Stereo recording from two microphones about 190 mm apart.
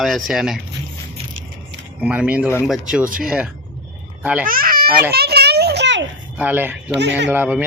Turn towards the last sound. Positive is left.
turn(degrees=-10)  # may be behind; listen again after turning